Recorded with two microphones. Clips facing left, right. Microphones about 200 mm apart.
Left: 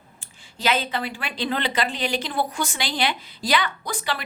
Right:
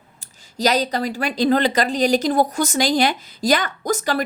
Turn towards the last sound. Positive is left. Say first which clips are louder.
# right 8 dB
turn(degrees=-45)  # may be behind; listen again after turning